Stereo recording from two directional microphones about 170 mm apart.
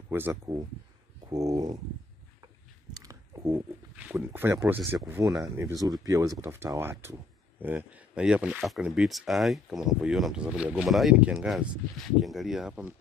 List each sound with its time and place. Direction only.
0.1 s speech: 15° right (ahead or behind)
1.3 s a sound: 20° right (ahead or behind)
5.4 s speech: 20° right (ahead or behind)